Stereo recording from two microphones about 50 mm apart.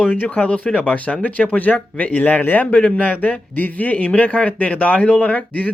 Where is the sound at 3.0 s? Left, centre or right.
Left.